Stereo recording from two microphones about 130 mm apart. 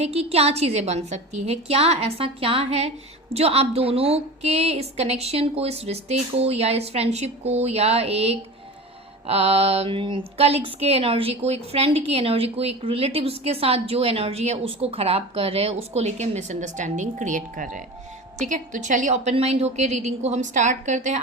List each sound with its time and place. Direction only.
0.0 s a woman's voice: 50° right (ahead or behind); by 21.2 s 65° right (ahead or behind)